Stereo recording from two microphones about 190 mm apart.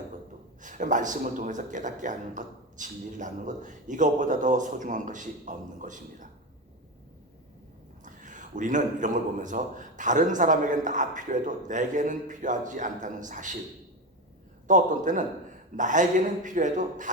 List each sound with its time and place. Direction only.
0.6 s speech: 40° right (ahead or behind)
8.0 s speech: 40° right (ahead or behind)
14.7 s speech: 40° right (ahead or behind)